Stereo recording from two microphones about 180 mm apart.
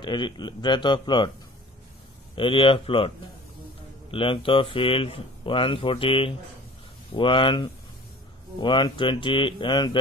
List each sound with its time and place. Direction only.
0.0 s speech: 25° left (ahead or behind)
2.3 s speech: 30° left (ahead or behind)
4.1 s speech: 30° left (ahead or behind)